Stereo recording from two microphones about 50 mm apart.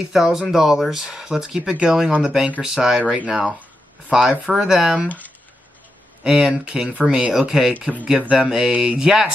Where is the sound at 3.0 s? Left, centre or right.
Right.